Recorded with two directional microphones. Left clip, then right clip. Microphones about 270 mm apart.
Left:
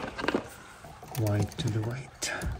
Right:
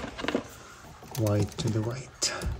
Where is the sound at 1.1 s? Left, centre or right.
Centre.